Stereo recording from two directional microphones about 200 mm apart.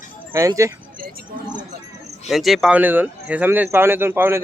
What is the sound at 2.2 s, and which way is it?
Speech, centre (ahead or behind).